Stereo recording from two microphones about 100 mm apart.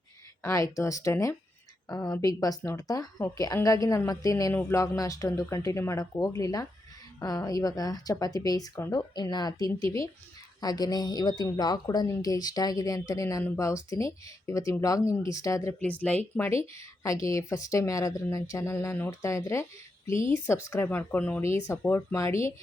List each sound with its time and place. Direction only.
0.4 s speech: 35° left (ahead or behind)
1.9 s speech: 40° left (ahead or behind)
15.8 s speech: 15° left (ahead or behind)
16.6 s speech: 30° left (ahead or behind)